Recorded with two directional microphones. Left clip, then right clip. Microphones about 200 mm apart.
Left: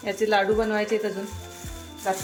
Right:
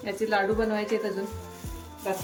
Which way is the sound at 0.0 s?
20° left (ahead or behind).